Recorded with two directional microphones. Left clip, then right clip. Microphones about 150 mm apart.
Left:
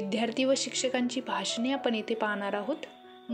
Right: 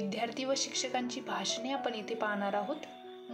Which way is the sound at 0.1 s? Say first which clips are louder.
Left 8 dB; 45° left (ahead or behind).